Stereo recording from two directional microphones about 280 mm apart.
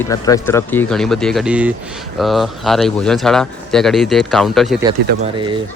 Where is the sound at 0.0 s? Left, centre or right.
Centre.